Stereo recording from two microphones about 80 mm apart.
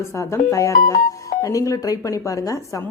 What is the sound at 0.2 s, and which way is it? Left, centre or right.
Speech, left.